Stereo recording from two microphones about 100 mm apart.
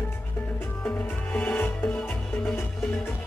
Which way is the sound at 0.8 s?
15° left (ahead or behind).